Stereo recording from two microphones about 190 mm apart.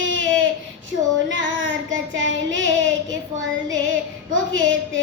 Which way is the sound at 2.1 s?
85° right.